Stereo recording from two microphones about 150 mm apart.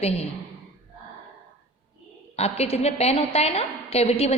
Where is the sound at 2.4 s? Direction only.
45° left (ahead or behind).